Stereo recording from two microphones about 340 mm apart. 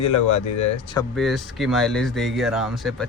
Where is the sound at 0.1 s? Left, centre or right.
Left.